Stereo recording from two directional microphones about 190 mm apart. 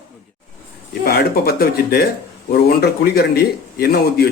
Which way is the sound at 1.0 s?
55° left (ahead or behind).